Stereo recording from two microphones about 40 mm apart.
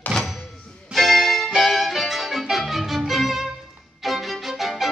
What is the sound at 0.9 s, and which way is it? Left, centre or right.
Music, centre.